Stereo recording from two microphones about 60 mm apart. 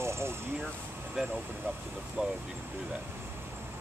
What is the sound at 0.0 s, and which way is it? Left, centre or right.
Vehicle, right.